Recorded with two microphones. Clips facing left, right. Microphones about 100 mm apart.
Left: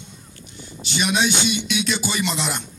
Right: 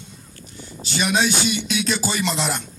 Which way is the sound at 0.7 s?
35° right (ahead or behind).